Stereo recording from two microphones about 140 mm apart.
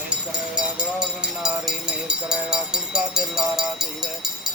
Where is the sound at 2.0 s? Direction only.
5° right (ahead or behind).